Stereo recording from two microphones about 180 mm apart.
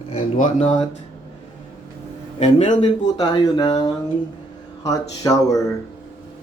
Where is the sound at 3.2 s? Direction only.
20° left (ahead or behind).